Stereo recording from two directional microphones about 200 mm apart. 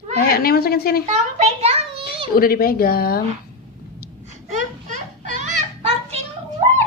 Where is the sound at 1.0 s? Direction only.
35° right (ahead or behind).